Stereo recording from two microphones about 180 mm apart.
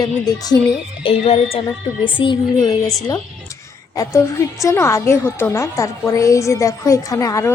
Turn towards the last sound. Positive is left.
turn(degrees=15)  # may be behind; listen again after turning